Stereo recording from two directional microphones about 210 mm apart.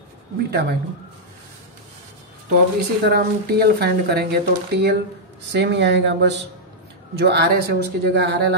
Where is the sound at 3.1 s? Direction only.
50° right (ahead or behind).